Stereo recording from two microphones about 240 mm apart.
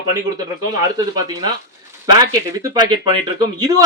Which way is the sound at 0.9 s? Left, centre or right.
Centre.